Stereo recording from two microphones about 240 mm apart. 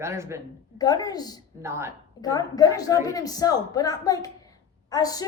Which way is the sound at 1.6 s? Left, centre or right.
Centre.